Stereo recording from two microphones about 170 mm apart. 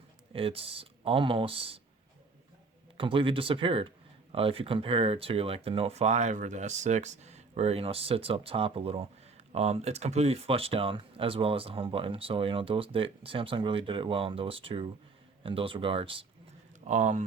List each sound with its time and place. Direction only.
0.3 s speech: 35° right (ahead or behind)
3.0 s speech: 30° right (ahead or behind)
16.8 s speech: 45° right (ahead or behind)